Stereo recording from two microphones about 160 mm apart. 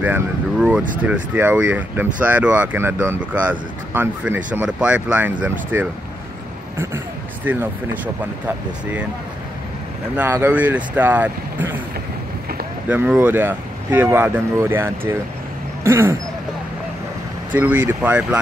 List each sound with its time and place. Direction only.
0.0 s speech: 10° right (ahead or behind)
10.1 s speech: 10° right (ahead or behind)
12.9 s speech: 10° right (ahead or behind)
17.6 s speech: 10° right (ahead or behind)